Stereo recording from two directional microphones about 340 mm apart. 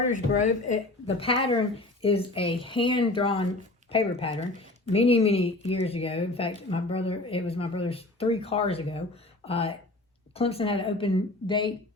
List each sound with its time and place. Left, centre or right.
0.1 s speech: left